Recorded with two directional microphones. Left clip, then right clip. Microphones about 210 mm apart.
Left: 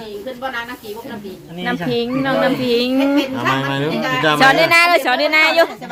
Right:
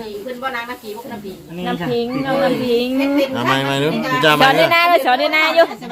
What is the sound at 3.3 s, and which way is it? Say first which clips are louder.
Speech: right 1 dB; 20° right (ahead or behind).